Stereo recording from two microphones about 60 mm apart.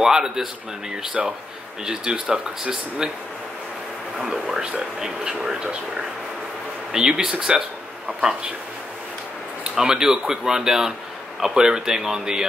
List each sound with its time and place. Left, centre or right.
0.0 s a man's voice: centre
4.2 s a man's voice: centre
6.9 s a man's voice: centre
9.8 s a man's voice: centre